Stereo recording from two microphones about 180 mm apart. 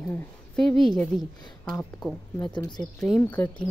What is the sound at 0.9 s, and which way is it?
Speech, 5° left (ahead or behind).